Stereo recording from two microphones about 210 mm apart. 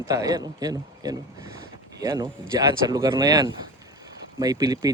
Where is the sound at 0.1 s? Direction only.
15° right (ahead or behind).